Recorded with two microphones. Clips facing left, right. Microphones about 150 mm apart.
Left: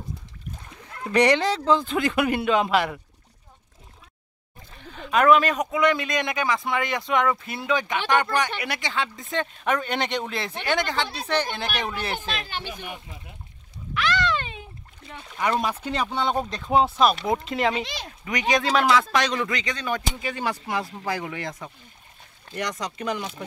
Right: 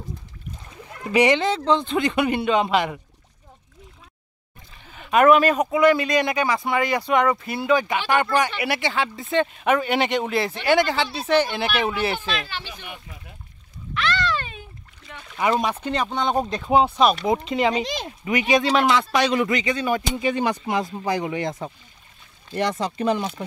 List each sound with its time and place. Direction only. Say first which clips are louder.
1.1 s speech: right 1 dB; centre (ahead or behind)
4.9 s speech: right 3 dB; 5° right (ahead or behind)
12.4 s speech: left 1 dB; 50° left (ahead or behind)
13.9 s splash: even; 15° left (ahead or behind)
15.3 s speech: right 3 dB; 10° right (ahead or behind)
15.8 s speech: right 2 dB; 5° left (ahead or behind)
16.4 s speech: right 2 dB; 5° right (ahead or behind)
20.2 s speech: right 6 dB; 20° right (ahead or behind)